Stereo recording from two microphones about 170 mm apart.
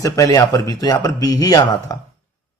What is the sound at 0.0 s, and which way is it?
A man's voice, 20° left (ahead or behind).